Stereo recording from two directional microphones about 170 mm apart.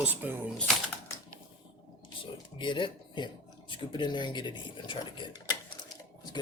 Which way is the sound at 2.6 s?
30° left (ahead or behind).